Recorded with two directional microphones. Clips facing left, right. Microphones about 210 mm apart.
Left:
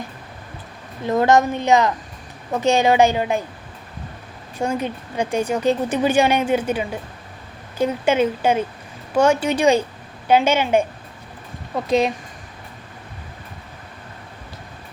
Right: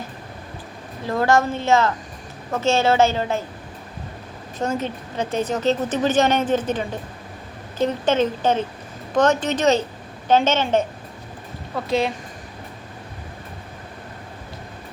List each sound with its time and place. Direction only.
1.0 s a woman's voice: 20° left (ahead or behind)
4.5 s a woman's voice: 10° left (ahead or behind)
11.9 s a woman's voice: 20° left (ahead or behind)